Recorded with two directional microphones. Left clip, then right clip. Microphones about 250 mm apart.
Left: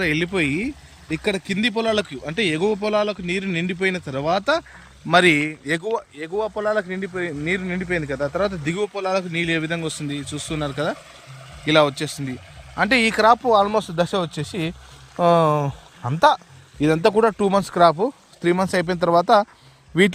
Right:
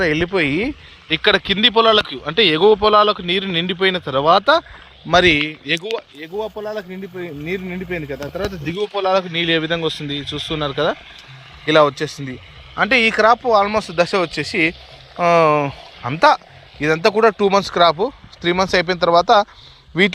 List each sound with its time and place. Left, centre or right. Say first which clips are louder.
0.0 s speech: right 4 dB; centre
5.6 s speech: right 2 dB; left